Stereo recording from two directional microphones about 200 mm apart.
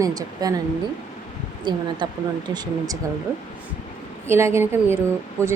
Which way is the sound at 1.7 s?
25° right (ahead or behind).